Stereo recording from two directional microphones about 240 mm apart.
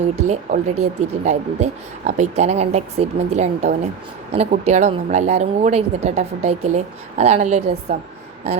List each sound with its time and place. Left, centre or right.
0.2 s speech: right